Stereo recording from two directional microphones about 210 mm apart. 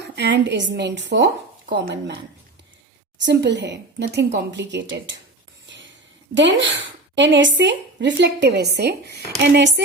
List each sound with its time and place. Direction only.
0.0 s speech: 55° right (ahead or behind)
6.3 s speech: 60° right (ahead or behind)